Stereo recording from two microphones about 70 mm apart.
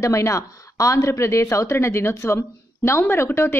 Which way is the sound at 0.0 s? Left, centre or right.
Left.